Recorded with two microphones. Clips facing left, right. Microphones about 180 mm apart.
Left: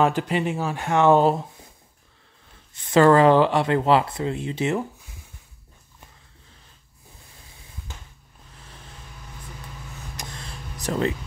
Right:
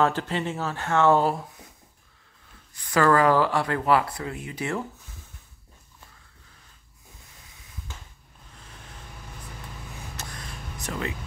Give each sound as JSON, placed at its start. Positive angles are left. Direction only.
{"t": 0.0, "sound": "speech", "side_deg": 15}
{"t": 2.7, "sound": "speech", "side_deg": 25}
{"t": 10.3, "sound": "vehicle", "side_deg": 30}